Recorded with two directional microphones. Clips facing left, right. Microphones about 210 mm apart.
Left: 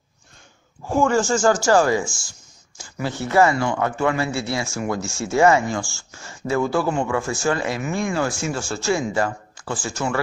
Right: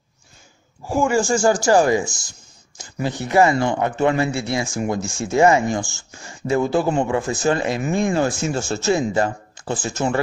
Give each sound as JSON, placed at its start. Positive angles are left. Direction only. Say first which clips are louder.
{"t": 0.8, "sound": "a woman's voice", "louder": "even", "side_deg": -10}